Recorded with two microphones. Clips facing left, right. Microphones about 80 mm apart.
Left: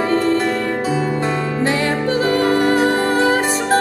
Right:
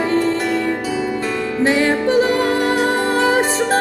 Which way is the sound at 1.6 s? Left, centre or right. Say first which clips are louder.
Right 4 dB; right.